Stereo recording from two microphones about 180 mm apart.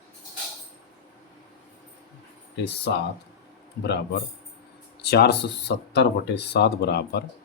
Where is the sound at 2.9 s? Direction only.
75° left (ahead or behind).